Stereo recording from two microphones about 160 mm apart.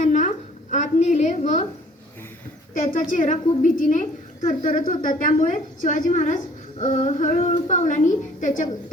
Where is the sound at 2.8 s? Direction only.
55° left (ahead or behind).